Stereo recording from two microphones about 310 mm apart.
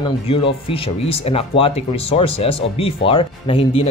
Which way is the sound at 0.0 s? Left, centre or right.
Centre.